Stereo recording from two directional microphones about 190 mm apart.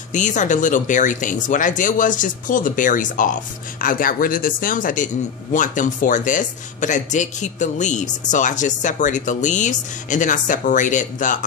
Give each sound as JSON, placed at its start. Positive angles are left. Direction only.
{"t": 0.1, "sound": "a man's voice", "side_deg": 40}